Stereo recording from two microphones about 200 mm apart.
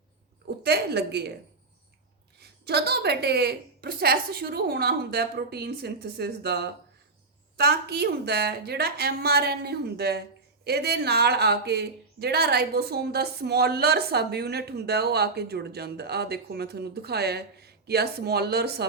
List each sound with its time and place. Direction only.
0.4 s a woman's voice: 55° right (ahead or behind)
2.4 s speech: 55° right (ahead or behind)